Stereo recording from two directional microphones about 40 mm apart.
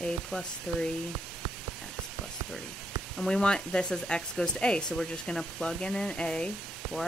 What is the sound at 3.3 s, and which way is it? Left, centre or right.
Speech, centre.